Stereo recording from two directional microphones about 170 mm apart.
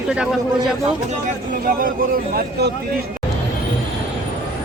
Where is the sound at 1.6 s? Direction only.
55° right (ahead or behind).